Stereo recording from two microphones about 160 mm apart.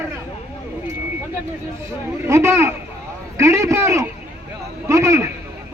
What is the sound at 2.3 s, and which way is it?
A man's voice, 15° right (ahead or behind).